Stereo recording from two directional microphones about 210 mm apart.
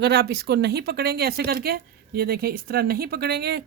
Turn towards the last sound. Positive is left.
turn(degrees=-50)  # may be behind; listen again after turning